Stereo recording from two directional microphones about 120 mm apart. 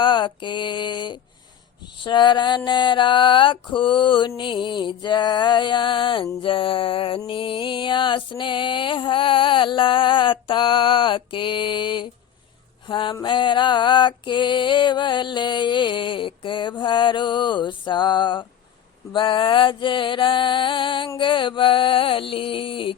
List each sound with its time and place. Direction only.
0.0 s music: 40° left (ahead or behind)